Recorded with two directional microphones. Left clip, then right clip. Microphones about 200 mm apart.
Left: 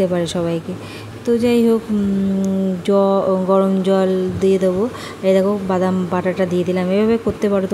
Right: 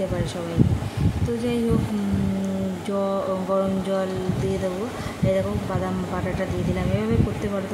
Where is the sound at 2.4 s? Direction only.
30° left (ahead or behind).